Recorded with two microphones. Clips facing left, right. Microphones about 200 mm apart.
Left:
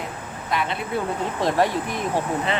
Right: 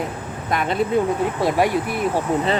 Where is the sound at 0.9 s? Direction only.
10° right (ahead or behind).